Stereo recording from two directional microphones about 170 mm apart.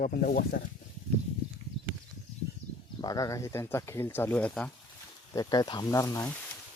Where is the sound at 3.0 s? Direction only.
20° left (ahead or behind).